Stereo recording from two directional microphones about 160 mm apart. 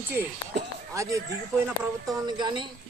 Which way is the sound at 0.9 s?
20° right (ahead or behind).